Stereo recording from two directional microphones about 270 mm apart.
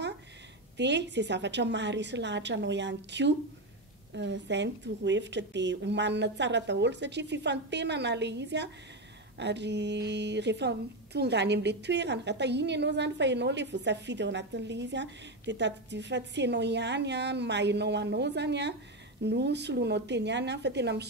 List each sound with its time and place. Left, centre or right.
0.7 s a woman's voice: right